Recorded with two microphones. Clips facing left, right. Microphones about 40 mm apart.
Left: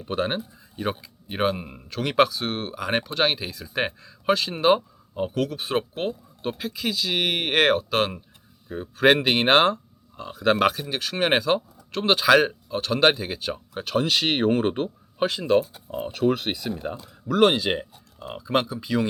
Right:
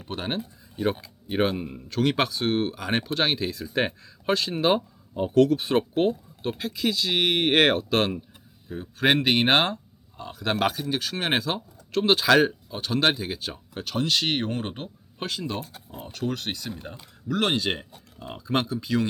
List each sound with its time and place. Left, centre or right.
0.1 s speech: centre
1.6 s speech: centre
1.9 s speech: centre